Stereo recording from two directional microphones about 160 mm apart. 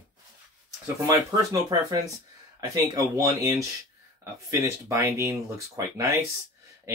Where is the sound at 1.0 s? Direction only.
25° right (ahead or behind).